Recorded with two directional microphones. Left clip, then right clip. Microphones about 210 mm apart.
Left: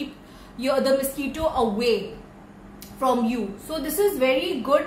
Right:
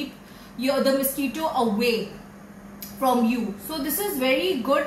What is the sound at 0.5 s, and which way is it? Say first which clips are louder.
A woman's voice: left 1 dB; 20° left (ahead or behind).